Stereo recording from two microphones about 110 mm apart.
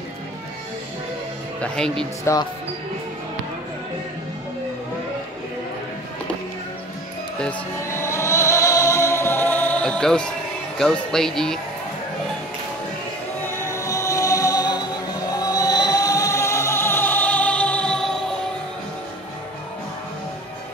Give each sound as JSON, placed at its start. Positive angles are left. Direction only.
{"t": 1.6, "sound": "speech", "side_deg": 5}
{"t": 2.3, "sound": "speech", "side_deg": 25}
{"t": 7.8, "sound": "music", "side_deg": 25}
{"t": 10.8, "sound": "speech", "side_deg": 5}
{"t": 13.5, "sound": "music", "side_deg": 25}